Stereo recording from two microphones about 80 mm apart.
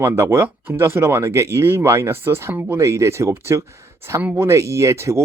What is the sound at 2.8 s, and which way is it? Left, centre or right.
Speech, right.